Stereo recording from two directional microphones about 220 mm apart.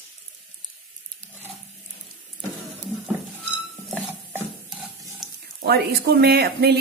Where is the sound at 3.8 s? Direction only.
5° right (ahead or behind).